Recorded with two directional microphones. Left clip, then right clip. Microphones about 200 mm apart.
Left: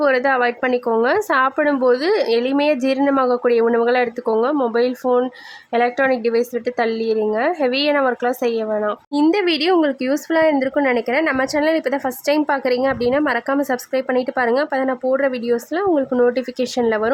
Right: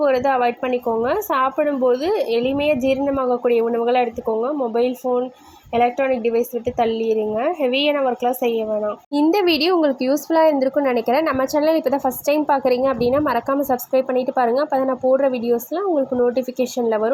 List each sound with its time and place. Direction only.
0.0 s speech: 10° left (ahead or behind)
5.0 s speech: 25° left (ahead or behind)
5.7 s speech: 10° left (ahead or behind)
7.7 s speech: 45° left (ahead or behind)
7.9 s speech: 10° left (ahead or behind)
9.3 s speech: 5° left (ahead or behind)